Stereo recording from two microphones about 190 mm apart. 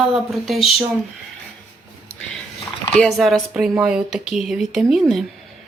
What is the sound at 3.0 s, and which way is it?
Speech, centre (ahead or behind).